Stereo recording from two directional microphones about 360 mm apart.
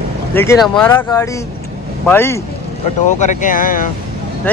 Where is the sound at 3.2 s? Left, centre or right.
Left.